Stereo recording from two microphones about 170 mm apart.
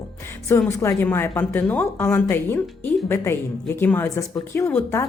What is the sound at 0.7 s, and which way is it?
Speech, 15° left (ahead or behind).